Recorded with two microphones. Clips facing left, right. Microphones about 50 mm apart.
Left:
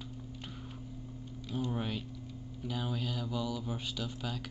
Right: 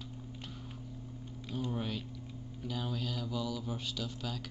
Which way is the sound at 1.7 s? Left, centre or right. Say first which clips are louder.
Left 1 dB; centre.